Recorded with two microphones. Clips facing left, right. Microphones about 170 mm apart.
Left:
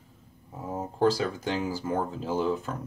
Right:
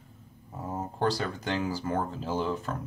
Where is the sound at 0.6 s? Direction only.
5° left (ahead or behind).